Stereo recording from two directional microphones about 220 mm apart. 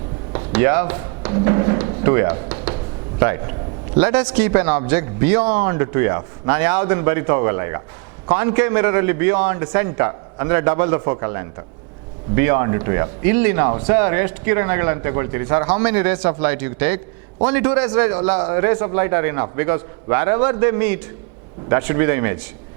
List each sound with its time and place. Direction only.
0.3 s a man's voice: 15° right (ahead or behind)